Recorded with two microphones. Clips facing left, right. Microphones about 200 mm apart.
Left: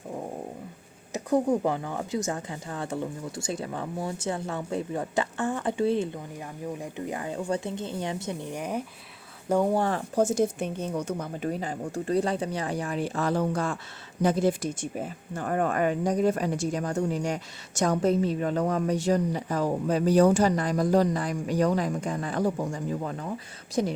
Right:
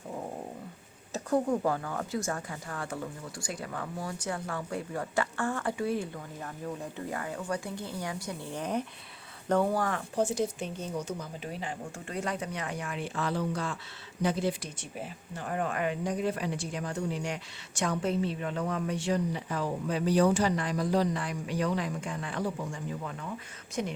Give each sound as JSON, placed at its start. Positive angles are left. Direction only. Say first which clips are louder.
{"t": 1.1, "sound": "speech", "louder": "left 4 dB", "side_deg": 20}
{"t": 9.7, "sound": "speech", "louder": "left 5 dB", "side_deg": 30}
{"t": 10.2, "sound": "a woman's voice", "louder": "left 5 dB", "side_deg": 45}